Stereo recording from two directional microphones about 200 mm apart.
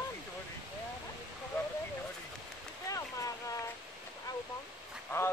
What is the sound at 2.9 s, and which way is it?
Boat, 15° left (ahead or behind).